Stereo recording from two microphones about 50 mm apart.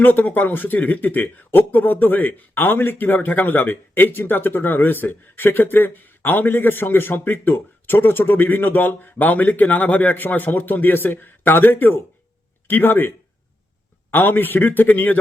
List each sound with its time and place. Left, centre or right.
0.0 s speech: left
14.1 s speech: left